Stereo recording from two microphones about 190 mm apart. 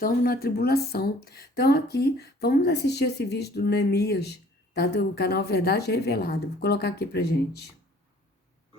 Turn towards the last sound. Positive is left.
turn(degrees=60)  # may be behind; listen again after turning